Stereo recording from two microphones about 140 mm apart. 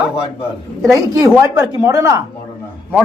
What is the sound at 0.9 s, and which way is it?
Speech, 20° right (ahead or behind).